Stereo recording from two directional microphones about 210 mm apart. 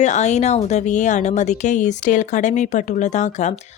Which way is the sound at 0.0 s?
35° left (ahead or behind).